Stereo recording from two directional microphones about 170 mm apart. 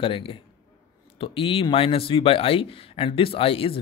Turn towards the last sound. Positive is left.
turn(degrees=30)  # may be behind; listen again after turning